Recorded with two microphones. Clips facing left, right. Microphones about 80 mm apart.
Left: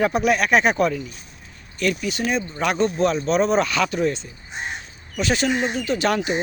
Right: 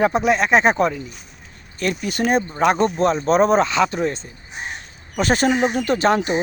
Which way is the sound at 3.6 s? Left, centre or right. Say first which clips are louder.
Right 2 dB; right.